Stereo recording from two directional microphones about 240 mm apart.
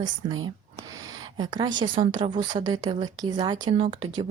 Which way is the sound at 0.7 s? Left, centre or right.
Centre.